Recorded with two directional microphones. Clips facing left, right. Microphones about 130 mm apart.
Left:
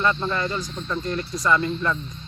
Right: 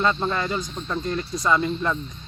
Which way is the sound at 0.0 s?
25° right (ahead or behind).